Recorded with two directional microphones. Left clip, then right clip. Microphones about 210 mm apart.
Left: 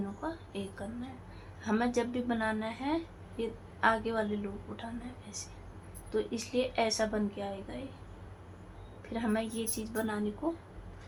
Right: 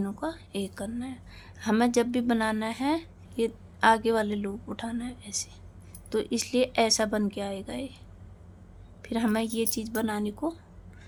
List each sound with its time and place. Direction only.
0.2 s a woman's voice: 60° right (ahead or behind)
9.0 s a woman's voice: 60° right (ahead or behind)